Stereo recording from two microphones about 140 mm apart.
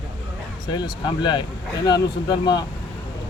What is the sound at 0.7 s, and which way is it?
Speech, 30° left (ahead or behind).